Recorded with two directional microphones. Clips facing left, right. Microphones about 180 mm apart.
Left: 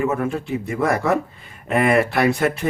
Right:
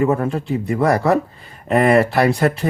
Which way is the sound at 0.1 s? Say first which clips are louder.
Right 3 dB; 35° right (ahead or behind).